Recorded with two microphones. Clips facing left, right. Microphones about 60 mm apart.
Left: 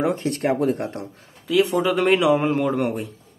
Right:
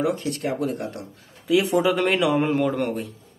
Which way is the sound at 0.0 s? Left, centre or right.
Left.